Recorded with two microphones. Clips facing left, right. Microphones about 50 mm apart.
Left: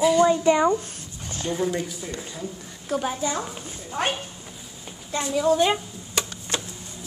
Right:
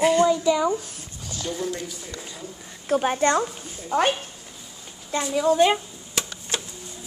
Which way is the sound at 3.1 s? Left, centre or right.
Right.